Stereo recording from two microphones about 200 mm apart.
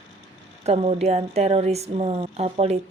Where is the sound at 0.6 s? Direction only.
30° right (ahead or behind).